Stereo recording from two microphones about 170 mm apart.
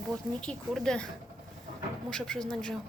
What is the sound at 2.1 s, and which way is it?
Speech, 5° left (ahead or behind).